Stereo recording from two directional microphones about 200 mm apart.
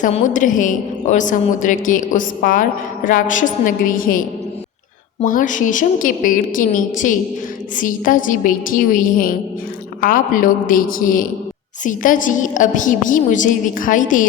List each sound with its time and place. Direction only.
0.0 s a woman's voice: 40° left (ahead or behind)